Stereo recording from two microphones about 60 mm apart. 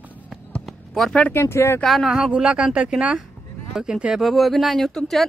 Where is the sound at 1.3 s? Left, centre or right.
Left.